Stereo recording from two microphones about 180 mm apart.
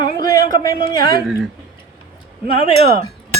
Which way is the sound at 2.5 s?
30° left (ahead or behind).